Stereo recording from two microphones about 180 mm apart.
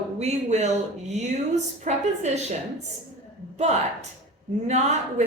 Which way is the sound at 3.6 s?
40° right (ahead or behind).